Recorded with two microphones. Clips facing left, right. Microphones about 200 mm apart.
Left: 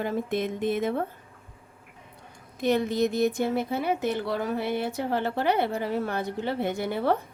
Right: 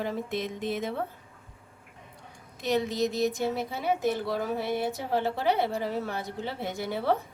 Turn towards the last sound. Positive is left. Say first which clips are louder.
# left 3 dB
turn(degrees=55)  # may be behind; listen again after turning